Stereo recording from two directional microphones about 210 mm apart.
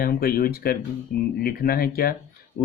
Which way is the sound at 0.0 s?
45° left (ahead or behind).